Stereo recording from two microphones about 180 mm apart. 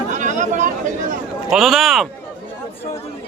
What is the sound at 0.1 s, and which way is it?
Chatter, 45° right (ahead or behind).